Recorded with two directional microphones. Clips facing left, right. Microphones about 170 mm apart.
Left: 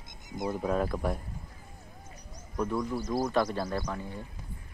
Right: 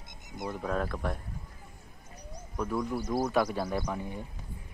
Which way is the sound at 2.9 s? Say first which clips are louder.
Even; 20° right (ahead or behind).